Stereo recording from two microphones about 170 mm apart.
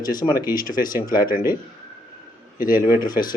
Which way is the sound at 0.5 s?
55° left (ahead or behind).